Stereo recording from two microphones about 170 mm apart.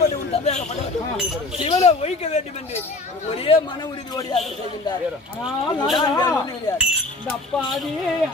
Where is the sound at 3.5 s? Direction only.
35° left (ahead or behind).